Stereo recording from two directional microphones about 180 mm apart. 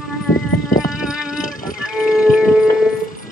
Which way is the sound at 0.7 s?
50° left (ahead or behind).